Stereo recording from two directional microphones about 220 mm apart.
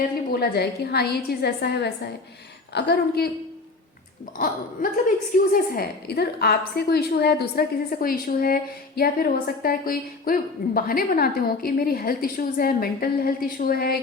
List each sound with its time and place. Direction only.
0.3 s a woman's voice: 45° left (ahead or behind)
4.4 s a woman's voice: 40° left (ahead or behind)